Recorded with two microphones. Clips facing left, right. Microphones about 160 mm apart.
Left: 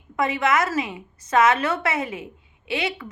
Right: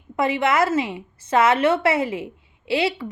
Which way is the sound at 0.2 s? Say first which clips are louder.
Right 2 dB; 30° right (ahead or behind).